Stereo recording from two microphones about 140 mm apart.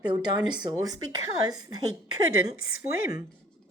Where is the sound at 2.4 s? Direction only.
90° left.